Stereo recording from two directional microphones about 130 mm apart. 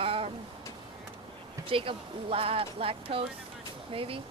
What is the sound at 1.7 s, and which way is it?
Speech, 45° right (ahead or behind).